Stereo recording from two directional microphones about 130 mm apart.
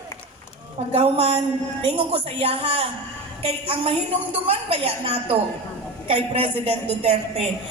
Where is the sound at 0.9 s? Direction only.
50° right (ahead or behind).